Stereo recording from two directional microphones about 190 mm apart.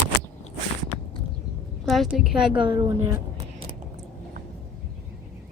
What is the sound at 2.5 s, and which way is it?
Speech, 25° right (ahead or behind).